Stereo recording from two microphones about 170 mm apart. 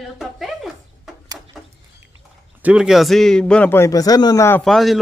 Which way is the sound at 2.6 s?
5° right (ahead or behind).